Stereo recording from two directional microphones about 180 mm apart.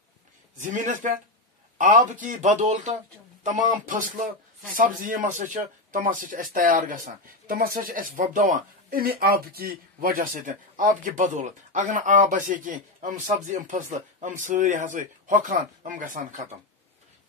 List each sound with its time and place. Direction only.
0.6 s speech: 45° right (ahead or behind)